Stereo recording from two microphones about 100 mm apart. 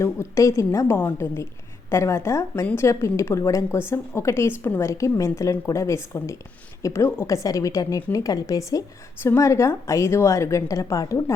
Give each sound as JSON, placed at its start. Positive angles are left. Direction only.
{"t": 0.0, "sound": "a woman's voice", "side_deg": 30}